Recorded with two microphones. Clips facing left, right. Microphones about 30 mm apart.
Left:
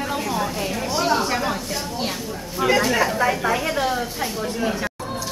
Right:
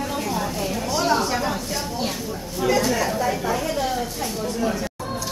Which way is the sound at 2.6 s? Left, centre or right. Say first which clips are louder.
Left 2 dB; centre.